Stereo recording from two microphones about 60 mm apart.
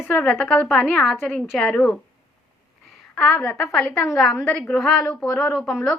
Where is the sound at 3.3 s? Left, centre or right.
Centre.